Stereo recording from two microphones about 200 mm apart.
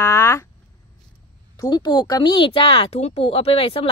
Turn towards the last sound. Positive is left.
turn(degrees=30)  # may be behind; listen again after turning